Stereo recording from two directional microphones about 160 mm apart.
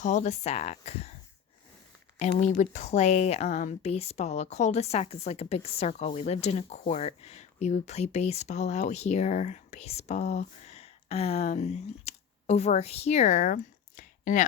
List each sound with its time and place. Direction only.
0.0 s speech: 45° left (ahead or behind)
2.1 s speech: 45° left (ahead or behind)